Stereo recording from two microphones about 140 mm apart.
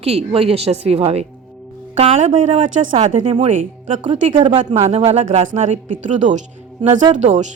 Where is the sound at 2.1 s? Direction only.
60° right (ahead or behind).